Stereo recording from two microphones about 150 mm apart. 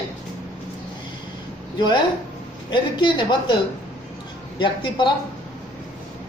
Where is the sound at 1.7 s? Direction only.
30° left (ahead or behind).